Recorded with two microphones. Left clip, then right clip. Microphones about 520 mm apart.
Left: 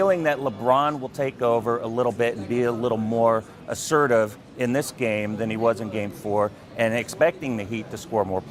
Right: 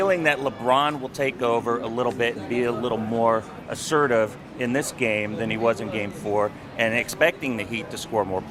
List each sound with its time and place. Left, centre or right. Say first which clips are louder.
0.0 s speech: even; left